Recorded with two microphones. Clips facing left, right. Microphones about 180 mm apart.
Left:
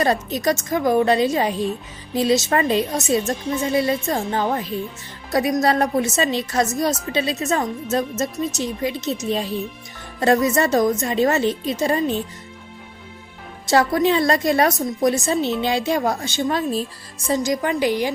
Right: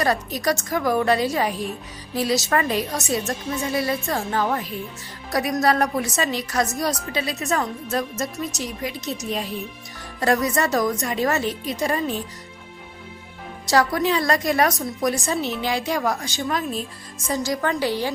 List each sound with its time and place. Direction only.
0.0 s speech: 20° left (ahead or behind)
10.2 s speech: 20° left (ahead or behind)
13.7 s a woman's voice: 25° left (ahead or behind)
17.4 s a woman's voice: 15° left (ahead or behind)